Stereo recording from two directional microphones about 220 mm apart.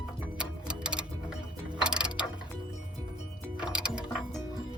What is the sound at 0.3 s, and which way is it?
Music, 5° right (ahead or behind).